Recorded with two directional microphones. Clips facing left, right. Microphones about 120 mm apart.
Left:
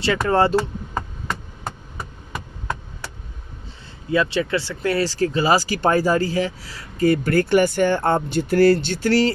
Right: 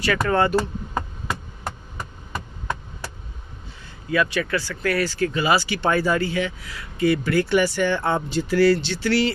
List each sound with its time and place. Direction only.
0.0 s speech: 30° left (ahead or behind)
4.1 s speech: 25° left (ahead or behind); by 9.3 s 45° left (ahead or behind)